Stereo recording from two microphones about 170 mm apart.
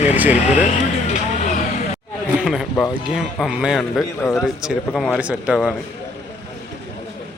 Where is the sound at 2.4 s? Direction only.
5° right (ahead or behind).